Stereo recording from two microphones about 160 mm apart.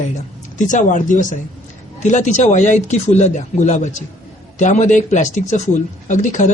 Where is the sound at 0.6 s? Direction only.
50° left (ahead or behind).